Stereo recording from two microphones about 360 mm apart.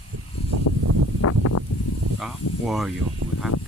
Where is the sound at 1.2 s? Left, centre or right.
Left.